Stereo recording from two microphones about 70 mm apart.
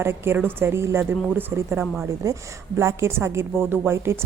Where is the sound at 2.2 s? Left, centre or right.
Right.